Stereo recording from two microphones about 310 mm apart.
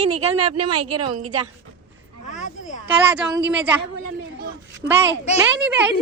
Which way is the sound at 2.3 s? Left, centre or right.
Left.